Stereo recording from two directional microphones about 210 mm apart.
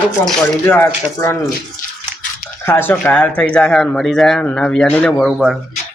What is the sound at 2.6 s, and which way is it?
A man's voice, 10° left (ahead or behind).